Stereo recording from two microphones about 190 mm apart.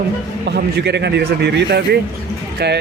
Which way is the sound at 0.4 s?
60° right (ahead or behind).